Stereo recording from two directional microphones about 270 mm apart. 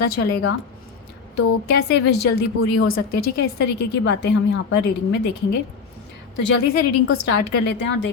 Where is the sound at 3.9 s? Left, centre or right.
Left.